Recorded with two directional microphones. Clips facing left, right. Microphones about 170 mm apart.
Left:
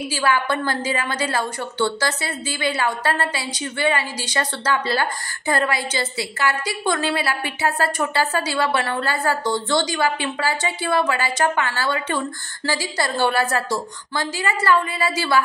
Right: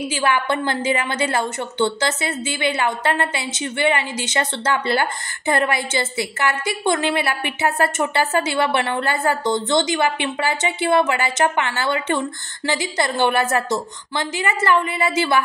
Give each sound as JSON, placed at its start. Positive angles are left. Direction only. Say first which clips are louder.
{"t": 0.1, "sound": "a woman's voice", "louder": "even", "side_deg": -20}